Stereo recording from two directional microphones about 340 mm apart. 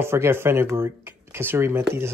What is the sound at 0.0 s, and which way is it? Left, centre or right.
Speech, centre.